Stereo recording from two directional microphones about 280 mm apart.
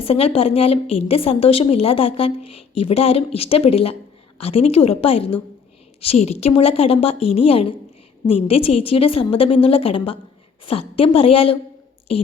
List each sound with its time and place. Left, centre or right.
0.0 s a woman's voice: left